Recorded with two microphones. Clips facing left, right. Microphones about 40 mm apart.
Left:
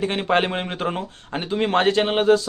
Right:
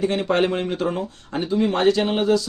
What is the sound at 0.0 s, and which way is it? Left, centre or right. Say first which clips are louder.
Speech: right 1 dB; left.